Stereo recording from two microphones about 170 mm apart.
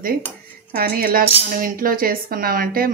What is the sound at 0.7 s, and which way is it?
Speech, 60° right (ahead or behind).